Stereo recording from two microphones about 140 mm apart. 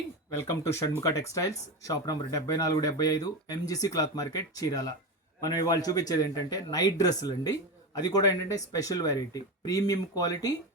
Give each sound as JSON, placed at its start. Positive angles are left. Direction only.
{"t": 0.3, "sound": "speech", "side_deg": 20}